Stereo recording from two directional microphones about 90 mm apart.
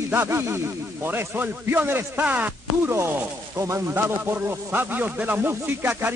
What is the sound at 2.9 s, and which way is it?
Speech, 30° right (ahead or behind).